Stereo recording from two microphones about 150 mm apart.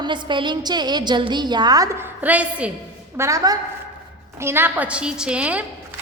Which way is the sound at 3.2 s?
20° right (ahead or behind).